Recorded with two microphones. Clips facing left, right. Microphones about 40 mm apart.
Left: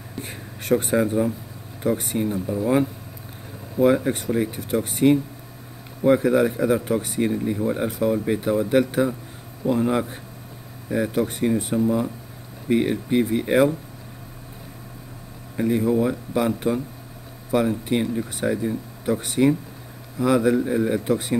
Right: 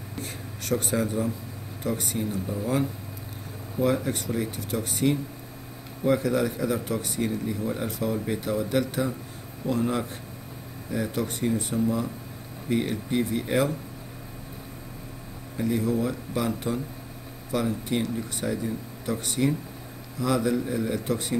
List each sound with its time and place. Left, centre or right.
0.2 s a sound: left
1.8 s speech: left
15.5 s speech: left